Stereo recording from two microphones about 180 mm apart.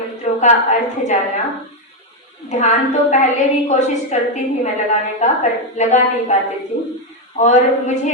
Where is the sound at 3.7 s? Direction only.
40° left (ahead or behind).